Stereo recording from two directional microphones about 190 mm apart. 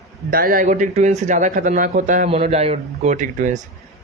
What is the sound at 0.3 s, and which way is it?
Speech, 50° right (ahead or behind).